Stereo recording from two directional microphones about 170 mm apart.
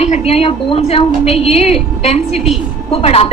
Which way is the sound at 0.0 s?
40° left (ahead or behind).